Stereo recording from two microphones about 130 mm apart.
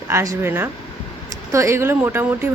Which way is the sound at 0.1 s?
20° right (ahead or behind).